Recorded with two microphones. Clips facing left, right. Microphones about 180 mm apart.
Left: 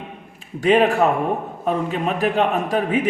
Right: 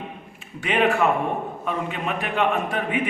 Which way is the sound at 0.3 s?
40° left (ahead or behind).